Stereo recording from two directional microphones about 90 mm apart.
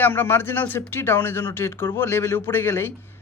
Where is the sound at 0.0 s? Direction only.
20° left (ahead or behind).